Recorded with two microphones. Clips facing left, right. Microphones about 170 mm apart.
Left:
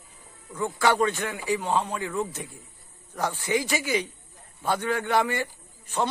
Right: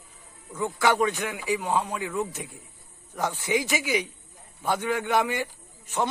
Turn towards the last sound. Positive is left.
turn(degrees=-20)  # may be behind; listen again after turning